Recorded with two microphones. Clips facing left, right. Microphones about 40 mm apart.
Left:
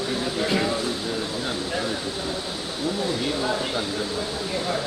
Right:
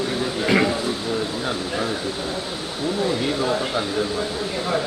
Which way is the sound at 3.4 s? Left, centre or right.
Centre.